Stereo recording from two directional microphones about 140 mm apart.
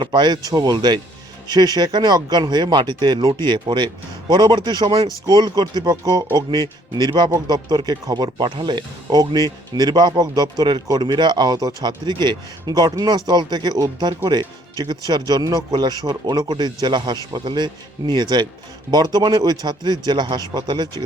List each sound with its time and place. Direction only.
0.0 s speech: 35° right (ahead or behind)